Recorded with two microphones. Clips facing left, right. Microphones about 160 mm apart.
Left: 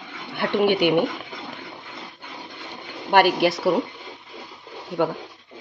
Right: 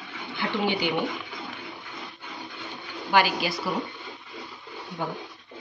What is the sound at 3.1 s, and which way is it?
Speech, 60° left (ahead or behind).